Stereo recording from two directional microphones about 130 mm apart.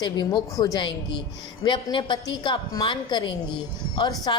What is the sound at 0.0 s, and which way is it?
A woman's voice, 35° left (ahead or behind).